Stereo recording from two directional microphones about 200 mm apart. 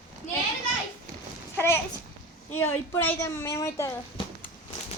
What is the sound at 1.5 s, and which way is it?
A child's voice, 10° left (ahead or behind).